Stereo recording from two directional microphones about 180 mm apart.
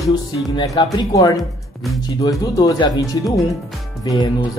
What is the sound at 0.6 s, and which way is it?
Speech, 20° left (ahead or behind).